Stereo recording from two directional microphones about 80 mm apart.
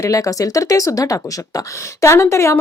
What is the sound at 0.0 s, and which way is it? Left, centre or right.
A woman's voice, left.